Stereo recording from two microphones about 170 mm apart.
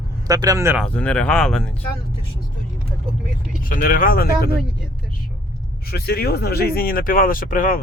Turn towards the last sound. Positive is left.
turn(degrees=55)  # may be behind; listen again after turning